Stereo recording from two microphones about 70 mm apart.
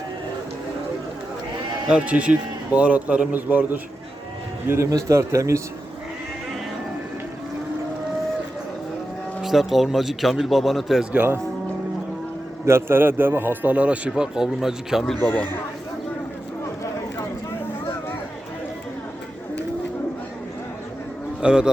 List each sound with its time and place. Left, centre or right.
1.9 s a man's voice: centre
4.9 s a man's voice: right
9.4 s a man's voice: centre
12.6 s a man's voice: right; by 15.0 s centre
15.2 s a man's voice: centre
21.4 s a man's voice: centre